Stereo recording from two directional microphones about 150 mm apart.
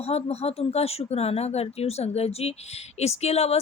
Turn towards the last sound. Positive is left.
turn(degrees=45)  # may be behind; listen again after turning